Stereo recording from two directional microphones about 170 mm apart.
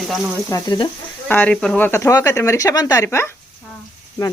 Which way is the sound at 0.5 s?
25° left (ahead or behind).